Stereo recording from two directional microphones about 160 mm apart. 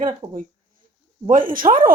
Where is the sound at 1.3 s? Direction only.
60° right (ahead or behind).